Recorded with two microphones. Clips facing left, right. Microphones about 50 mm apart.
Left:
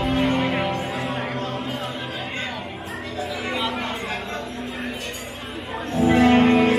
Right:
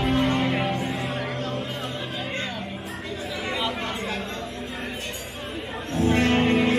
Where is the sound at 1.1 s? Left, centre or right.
Centre.